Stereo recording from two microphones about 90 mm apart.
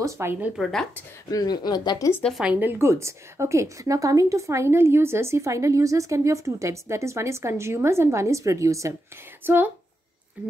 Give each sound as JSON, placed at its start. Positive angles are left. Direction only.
{"t": 0.0, "sound": "speech", "side_deg": -30}
{"t": 0.6, "sound": "a woman's voice", "side_deg": 5}
{"t": 1.3, "sound": "speech", "side_deg": 50}
{"t": 2.4, "sound": "a woman's voice", "side_deg": -20}
{"t": 9.4, "sound": "speech", "side_deg": -20}